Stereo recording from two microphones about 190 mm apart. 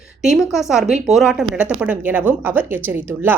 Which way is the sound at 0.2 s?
Centre (ahead or behind).